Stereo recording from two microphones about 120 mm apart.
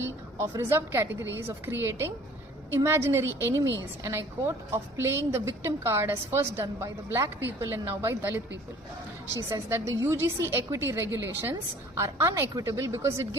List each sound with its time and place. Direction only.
0.4 s a woman's voice: 25° right (ahead or behind)
9.5 s a woman's voice: 25° right (ahead or behind)